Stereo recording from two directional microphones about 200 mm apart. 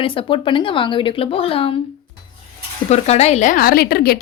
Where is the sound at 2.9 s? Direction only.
30° left (ahead or behind); by 4.2 s 50° left (ahead or behind).